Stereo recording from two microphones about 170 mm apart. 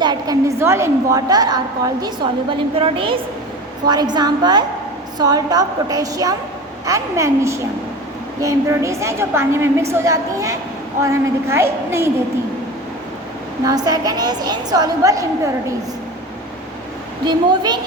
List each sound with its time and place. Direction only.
0.0 s a woman's voice: 25° right (ahead or behind)
13.7 s a woman's voice: 25° right (ahead or behind)
17.2 s a woman's voice: 25° right (ahead or behind)